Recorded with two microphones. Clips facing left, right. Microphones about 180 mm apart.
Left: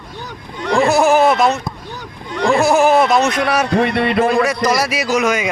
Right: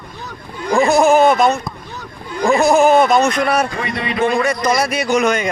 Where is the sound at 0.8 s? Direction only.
5° left (ahead or behind).